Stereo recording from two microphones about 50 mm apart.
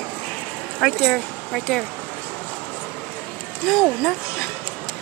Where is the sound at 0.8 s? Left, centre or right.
Centre.